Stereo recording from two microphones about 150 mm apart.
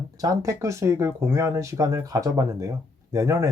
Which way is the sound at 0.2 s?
20° right (ahead or behind).